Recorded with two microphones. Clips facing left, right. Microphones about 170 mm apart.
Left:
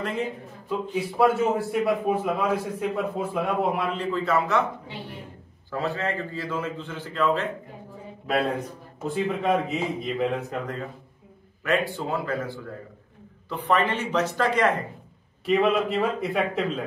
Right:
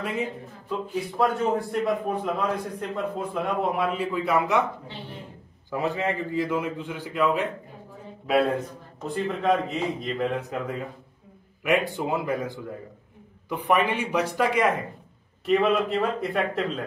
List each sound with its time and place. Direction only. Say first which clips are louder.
0.9 s a man's voice: left 3 dB; 5° left (ahead or behind); by 4.6 s 15° right (ahead or behind)
5.7 s a man's voice: right 1 dB; 15° right (ahead or behind)
9.0 s a man's voice: even; centre (ahead or behind)
11.6 s a man's voice: right 1 dB; 15° right (ahead or behind)
15.4 s a man's voice: even; centre (ahead or behind)